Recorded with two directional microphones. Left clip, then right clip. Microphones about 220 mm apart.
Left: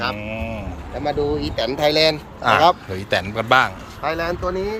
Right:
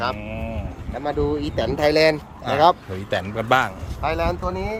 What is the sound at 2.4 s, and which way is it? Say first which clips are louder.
Speech: left 8 dB; 5° right (ahead or behind).